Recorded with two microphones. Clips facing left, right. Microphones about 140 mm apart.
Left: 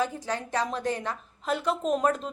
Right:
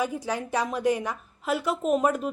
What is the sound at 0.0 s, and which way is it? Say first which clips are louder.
A woman's voice: right 1 dB; 10° right (ahead or behind).